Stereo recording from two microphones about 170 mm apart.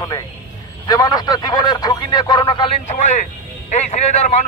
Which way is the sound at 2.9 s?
45° left (ahead or behind).